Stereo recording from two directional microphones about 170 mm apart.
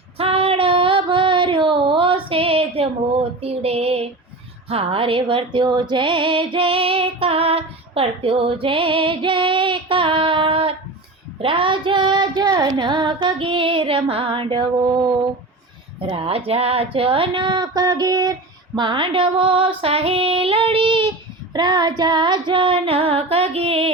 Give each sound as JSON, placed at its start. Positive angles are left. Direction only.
{"t": 0.2, "sound": "female singing", "side_deg": -35}
{"t": 3.4, "sound": "speech", "side_deg": -35}
{"t": 4.7, "sound": "female singing", "side_deg": -35}
{"t": 16.0, "sound": "speech", "side_deg": -35}
{"t": 21.5, "sound": "female singing", "side_deg": -25}